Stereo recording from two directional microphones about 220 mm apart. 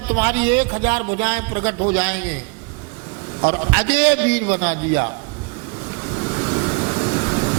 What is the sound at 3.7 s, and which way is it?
A man's voice, 10° right (ahead or behind).